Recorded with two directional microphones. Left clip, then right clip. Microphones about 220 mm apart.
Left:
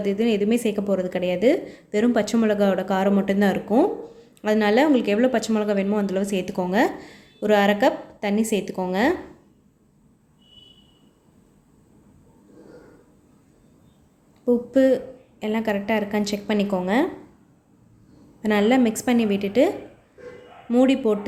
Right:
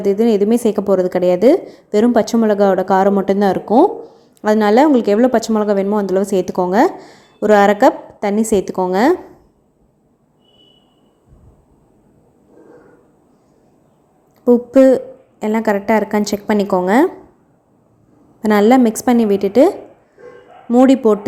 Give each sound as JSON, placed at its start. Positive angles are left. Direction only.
{"t": 0.0, "sound": "a woman's voice", "side_deg": -25}
{"t": 14.4, "sound": "a woman's voice", "side_deg": -25}
{"t": 18.4, "sound": "a woman's voice", "side_deg": -30}